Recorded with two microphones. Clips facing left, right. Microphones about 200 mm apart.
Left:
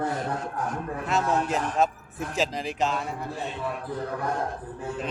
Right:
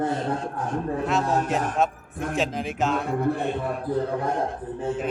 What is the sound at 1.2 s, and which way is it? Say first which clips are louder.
Speech: right 1 dB; 40° right (ahead or behind).